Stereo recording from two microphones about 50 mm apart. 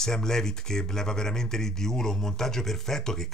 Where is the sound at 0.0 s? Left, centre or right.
Centre.